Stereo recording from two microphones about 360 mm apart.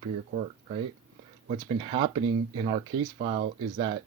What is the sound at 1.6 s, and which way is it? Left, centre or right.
Speech, centre.